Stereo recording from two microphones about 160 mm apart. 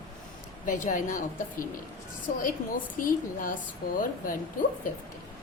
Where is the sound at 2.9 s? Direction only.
60° left (ahead or behind).